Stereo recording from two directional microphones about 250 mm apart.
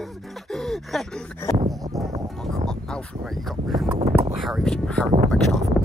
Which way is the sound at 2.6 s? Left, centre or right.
Centre.